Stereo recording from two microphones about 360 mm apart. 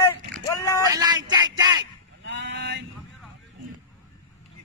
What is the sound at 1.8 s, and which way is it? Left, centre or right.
Sheep, right.